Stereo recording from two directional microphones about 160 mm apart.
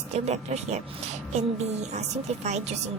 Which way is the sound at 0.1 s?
45° right (ahead or behind).